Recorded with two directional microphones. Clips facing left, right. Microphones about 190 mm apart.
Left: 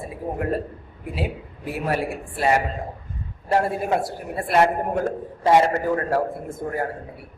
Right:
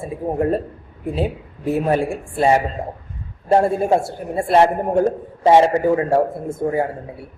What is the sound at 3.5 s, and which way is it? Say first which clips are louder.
A man's voice: right 6 dB; 25° right (ahead or behind).